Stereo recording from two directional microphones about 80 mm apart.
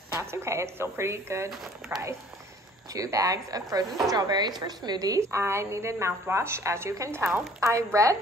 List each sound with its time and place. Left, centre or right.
0.2 s a woman's voice: right
2.9 s a woman's voice: right
5.2 s a woman's voice: right